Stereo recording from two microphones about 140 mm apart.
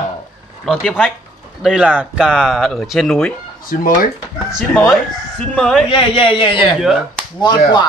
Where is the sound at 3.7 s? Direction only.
90° left.